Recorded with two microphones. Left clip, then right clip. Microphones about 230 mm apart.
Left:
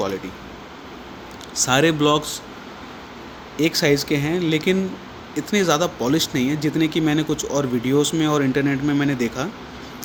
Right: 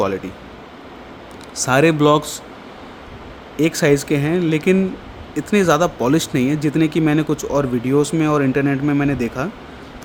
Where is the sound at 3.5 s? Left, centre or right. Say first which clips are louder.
Right 3 dB; right.